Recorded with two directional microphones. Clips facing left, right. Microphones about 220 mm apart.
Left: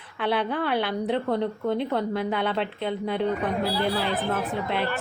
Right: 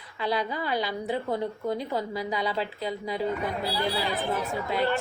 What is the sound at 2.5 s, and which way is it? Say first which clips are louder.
Speech: left 3 dB; centre (ahead or behind).